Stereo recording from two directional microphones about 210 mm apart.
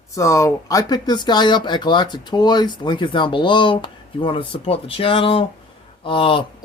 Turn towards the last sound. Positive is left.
turn(degrees=25)  # may be behind; listen again after turning